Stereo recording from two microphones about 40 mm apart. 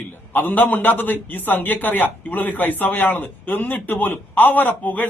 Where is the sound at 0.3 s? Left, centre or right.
Left.